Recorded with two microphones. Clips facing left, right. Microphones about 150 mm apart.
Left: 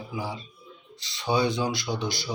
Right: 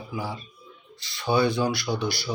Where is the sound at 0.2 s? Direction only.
20° left (ahead or behind).